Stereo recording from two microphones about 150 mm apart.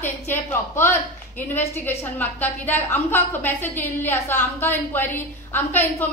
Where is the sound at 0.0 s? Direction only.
15° left (ahead or behind).